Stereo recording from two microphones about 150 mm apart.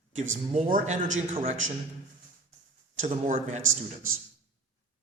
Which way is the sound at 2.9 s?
55° right (ahead or behind).